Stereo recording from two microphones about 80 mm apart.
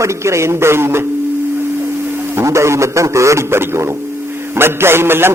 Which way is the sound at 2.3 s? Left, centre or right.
Right.